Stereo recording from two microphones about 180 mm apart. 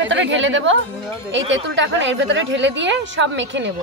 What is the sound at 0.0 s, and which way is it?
A woman's voice, 90° right.